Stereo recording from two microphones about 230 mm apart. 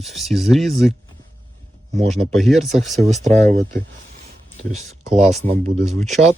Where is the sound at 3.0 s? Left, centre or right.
Right.